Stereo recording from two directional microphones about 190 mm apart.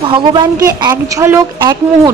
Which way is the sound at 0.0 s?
25° right (ahead or behind).